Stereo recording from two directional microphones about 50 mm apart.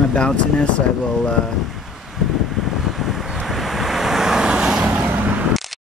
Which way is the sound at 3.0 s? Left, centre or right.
Centre.